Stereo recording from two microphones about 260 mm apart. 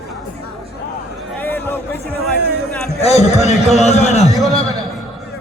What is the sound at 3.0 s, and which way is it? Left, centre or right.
Speech, left.